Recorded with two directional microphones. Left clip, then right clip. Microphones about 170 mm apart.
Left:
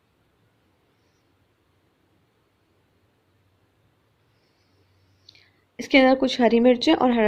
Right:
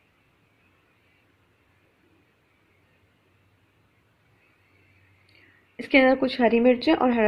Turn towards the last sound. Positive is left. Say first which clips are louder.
# left 2 dB
turn(degrees=25)  # may be behind; listen again after turning